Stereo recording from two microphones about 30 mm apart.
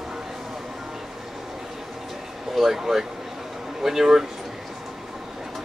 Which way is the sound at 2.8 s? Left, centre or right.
Centre.